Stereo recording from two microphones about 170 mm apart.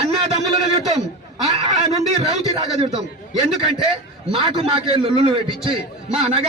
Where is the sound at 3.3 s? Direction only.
35° right (ahead or behind).